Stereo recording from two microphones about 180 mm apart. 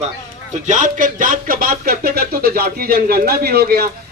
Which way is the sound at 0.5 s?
45° right (ahead or behind).